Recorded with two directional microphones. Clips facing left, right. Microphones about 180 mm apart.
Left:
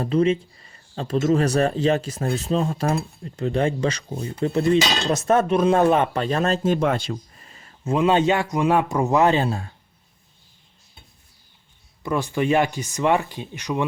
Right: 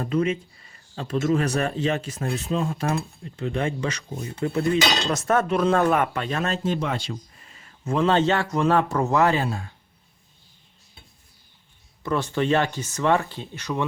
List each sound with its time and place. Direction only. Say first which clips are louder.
0.0 s speech: left 4 dB; 30° left (ahead or behind); by 7.2 s 55° left (ahead or behind)
7.3 s a sound: left 3 dB; 40° left (ahead or behind)
7.9 s speech: left 2 dB; 15° left (ahead or behind)
9.5 s speech: left 3 dB; 35° left (ahead or behind)
12.0 s speech: left 1 dB; 10° left (ahead or behind)